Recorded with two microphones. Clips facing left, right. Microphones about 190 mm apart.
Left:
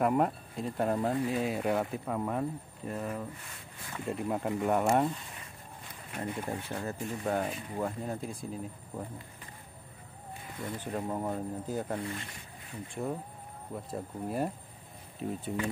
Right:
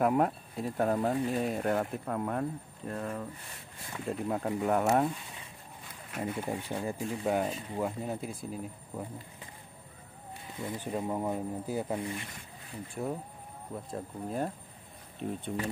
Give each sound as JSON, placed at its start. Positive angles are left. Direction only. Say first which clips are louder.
{"t": 0.0, "sound": "speech", "louder": "right 1 dB", "side_deg": 0}
{"t": 10.6, "sound": "speech", "louder": "right 1 dB", "side_deg": -20}
{"t": 10.9, "sound": "speech", "louder": "right 1 dB", "side_deg": -5}
{"t": 12.9, "sound": "speech", "louder": "even", "side_deg": -5}